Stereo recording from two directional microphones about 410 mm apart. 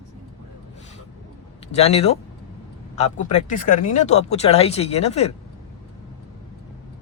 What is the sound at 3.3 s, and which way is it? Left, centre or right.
Speech, centre.